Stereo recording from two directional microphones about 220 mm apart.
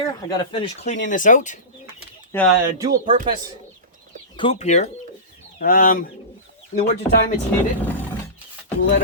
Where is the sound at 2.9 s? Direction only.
35° right (ahead or behind).